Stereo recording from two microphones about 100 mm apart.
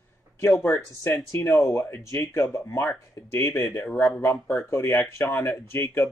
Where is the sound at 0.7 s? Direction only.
35° left (ahead or behind).